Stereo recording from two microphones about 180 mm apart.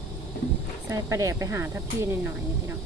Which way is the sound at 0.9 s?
20° right (ahead or behind).